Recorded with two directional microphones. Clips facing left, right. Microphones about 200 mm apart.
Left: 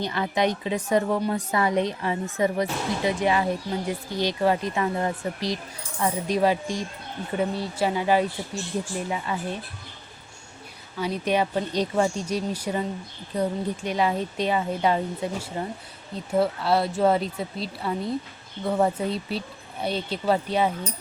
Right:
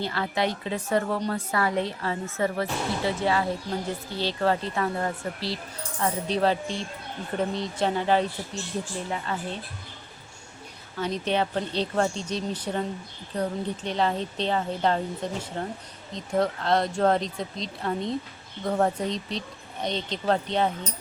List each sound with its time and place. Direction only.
0.0 s speech: 20° left (ahead or behind)
11.0 s speech: 10° left (ahead or behind)